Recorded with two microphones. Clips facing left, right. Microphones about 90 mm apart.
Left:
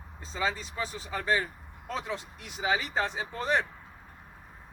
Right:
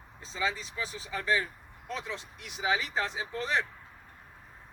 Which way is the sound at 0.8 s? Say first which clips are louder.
Left 3 dB; 45° left (ahead or behind).